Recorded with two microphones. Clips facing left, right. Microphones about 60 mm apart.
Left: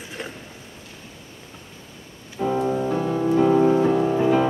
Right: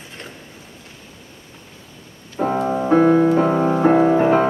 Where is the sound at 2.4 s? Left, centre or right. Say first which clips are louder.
Right 3 dB; right.